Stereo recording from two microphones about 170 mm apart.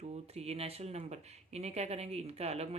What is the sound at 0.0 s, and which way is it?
Speech, 40° right (ahead or behind).